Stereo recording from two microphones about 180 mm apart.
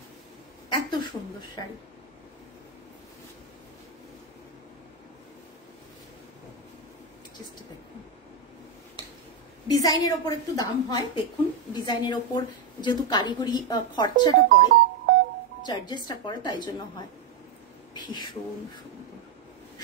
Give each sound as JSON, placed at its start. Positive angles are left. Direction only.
{"t": 0.7, "sound": "speech", "side_deg": 25}
{"t": 9.7, "sound": "a woman's voice", "side_deg": 20}
{"t": 17.9, "sound": "a woman's voice", "side_deg": 25}